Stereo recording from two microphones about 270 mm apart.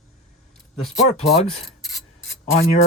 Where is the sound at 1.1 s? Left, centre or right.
Left.